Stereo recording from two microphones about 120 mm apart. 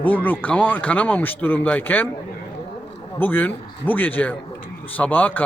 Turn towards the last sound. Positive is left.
turn(degrees=15)  # may be behind; listen again after turning